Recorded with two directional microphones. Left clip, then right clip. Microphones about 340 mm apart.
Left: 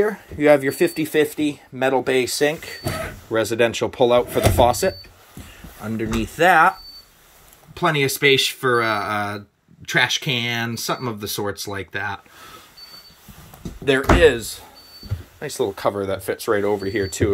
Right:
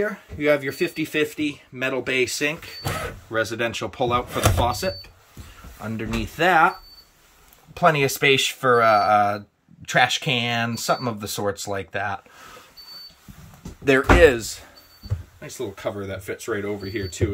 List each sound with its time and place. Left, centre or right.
0.0 s speech: centre
7.7 s speech: centre
13.8 s speech: centre
15.4 s speech: centre